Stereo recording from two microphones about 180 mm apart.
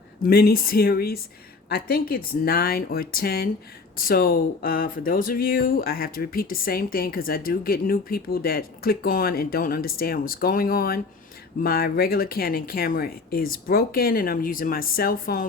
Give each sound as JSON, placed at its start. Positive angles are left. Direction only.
{"t": 0.2, "sound": "speech", "side_deg": 55}